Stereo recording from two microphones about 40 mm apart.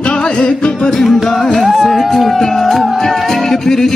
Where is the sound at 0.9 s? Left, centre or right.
Centre.